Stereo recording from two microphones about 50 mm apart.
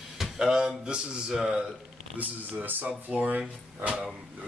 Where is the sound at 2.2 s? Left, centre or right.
Right.